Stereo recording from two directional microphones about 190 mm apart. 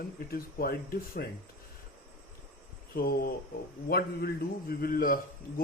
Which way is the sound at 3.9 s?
55° left (ahead or behind).